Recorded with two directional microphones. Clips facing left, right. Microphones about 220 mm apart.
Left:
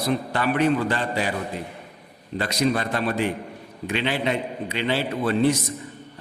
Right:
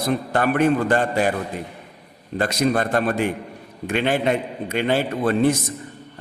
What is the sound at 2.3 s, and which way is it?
A man's voice, 50° right (ahead or behind).